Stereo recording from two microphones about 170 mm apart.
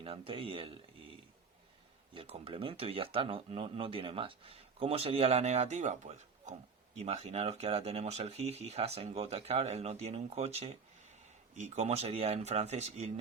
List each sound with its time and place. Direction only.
0.0 s speech: 35° right (ahead or behind)
2.1 s speech: 35° right (ahead or behind)